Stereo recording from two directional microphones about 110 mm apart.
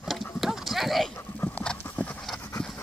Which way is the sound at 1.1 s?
15° left (ahead or behind).